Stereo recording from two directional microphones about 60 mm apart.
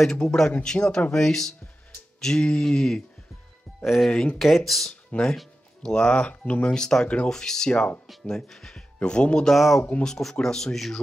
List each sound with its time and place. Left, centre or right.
0.0 s speech: centre
2.1 s music: centre
2.6 s speech: centre
4.1 s speech: centre
4.4 s speech: centre; by 6.7 s left
6.7 s speech: centre
9.6 s speech: centre
10.0 s speech: centre